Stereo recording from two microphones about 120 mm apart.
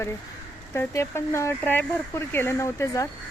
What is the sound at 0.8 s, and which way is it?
A woman's voice, 20° left (ahead or behind).